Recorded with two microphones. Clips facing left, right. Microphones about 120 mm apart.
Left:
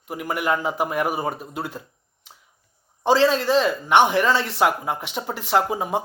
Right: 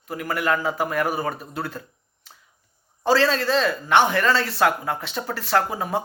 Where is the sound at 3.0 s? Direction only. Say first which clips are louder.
Left 2 dB; 20° left (ahead or behind).